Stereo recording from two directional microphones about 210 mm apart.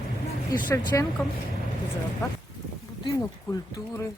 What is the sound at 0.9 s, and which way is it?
Speech, 10° left (ahead or behind).